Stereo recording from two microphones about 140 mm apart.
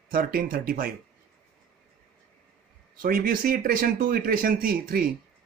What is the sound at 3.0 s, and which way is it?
Speech, 90° right.